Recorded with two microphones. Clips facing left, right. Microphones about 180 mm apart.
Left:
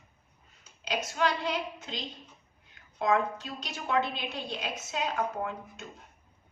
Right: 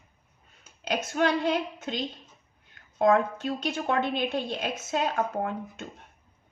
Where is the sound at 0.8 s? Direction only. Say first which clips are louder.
Right 4 dB; 50° right (ahead or behind).